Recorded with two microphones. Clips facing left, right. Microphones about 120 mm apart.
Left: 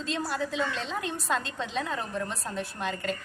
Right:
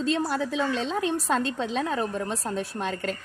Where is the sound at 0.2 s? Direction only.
50° right (ahead or behind).